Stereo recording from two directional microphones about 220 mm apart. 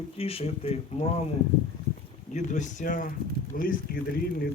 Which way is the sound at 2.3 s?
30° left (ahead or behind).